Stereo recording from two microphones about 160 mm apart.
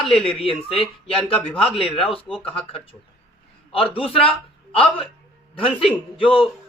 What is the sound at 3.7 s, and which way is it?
A man's voice, 35° left (ahead or behind).